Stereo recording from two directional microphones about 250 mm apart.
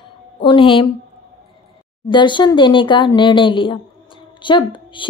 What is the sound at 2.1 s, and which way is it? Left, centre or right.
Speech, centre.